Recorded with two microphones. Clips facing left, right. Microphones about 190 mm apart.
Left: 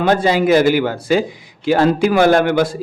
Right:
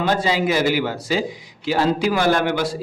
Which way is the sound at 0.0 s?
55° left (ahead or behind).